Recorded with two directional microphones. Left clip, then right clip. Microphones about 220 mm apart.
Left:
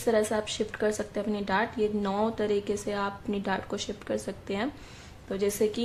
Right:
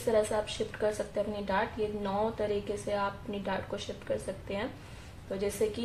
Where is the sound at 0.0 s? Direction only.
50° left (ahead or behind).